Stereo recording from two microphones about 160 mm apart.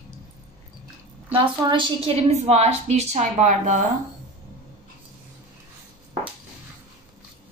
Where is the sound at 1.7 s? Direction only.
35° right (ahead or behind); by 3.8 s 50° right (ahead or behind).